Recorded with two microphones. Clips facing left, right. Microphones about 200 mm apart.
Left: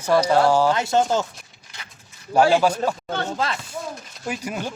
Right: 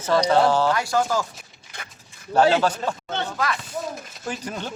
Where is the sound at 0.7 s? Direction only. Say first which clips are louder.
Left 2 dB; 25° left (ahead or behind).